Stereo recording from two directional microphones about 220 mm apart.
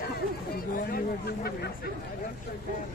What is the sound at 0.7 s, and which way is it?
Speech, 40° left (ahead or behind).